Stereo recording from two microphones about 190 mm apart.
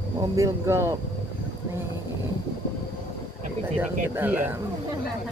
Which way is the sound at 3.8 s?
10° right (ahead or behind).